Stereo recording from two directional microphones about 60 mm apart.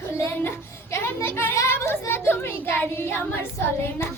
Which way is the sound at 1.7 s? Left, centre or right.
Left.